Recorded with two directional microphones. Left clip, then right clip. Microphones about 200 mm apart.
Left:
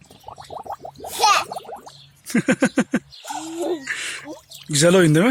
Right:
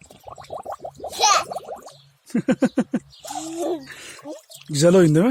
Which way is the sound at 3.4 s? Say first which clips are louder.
Even; 15° right (ahead or behind).